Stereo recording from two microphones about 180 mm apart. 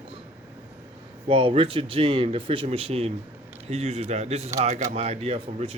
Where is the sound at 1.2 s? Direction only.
30° right (ahead or behind).